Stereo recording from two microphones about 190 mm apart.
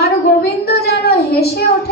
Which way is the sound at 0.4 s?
55° left (ahead or behind).